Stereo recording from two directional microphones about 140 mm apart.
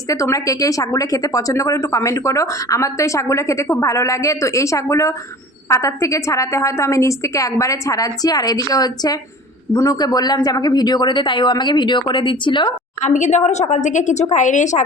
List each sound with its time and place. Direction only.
0.1 s speech: 25° left (ahead or behind)
13.0 s a woman's voice: 55° left (ahead or behind)